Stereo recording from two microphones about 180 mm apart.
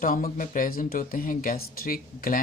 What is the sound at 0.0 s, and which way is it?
Speech, 50° left (ahead or behind).